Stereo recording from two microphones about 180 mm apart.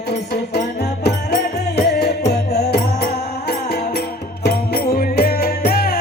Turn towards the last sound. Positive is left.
turn(degrees=55)  # may be behind; listen again after turning